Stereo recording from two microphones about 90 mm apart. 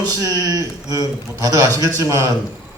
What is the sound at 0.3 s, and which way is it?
A man's voice, 40° right (ahead or behind).